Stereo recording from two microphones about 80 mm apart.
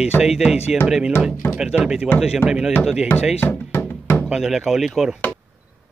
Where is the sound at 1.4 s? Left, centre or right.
Left.